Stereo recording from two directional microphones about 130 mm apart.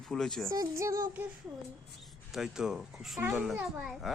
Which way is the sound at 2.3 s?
5° right (ahead or behind).